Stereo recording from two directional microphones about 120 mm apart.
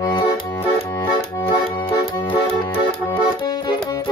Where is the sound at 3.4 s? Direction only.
40° left (ahead or behind).